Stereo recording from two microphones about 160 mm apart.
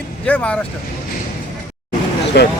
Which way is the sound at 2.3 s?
90° left.